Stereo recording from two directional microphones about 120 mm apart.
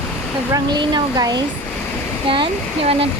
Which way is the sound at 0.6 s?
35° right (ahead or behind).